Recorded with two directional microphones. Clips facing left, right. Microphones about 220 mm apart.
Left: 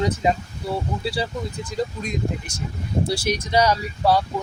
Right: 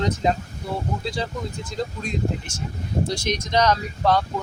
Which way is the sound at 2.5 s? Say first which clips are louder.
Left 1 dB; 35° left (ahead or behind).